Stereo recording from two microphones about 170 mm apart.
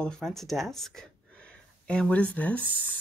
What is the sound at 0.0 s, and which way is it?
Speech, 5° left (ahead or behind).